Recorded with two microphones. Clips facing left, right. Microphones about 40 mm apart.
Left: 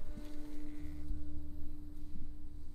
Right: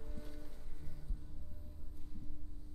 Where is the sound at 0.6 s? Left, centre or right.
Left.